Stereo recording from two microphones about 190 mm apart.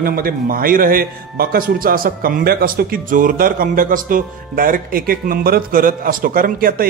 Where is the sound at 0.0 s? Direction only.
50° right (ahead or behind).